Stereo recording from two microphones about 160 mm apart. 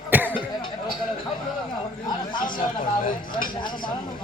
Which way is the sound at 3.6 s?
30° left (ahead or behind).